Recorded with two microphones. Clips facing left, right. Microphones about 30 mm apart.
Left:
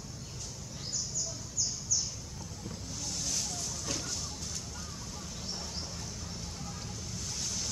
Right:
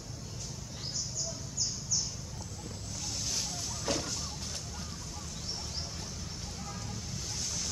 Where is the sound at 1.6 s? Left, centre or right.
Right.